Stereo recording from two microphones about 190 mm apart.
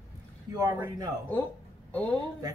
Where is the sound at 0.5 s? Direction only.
15° right (ahead or behind).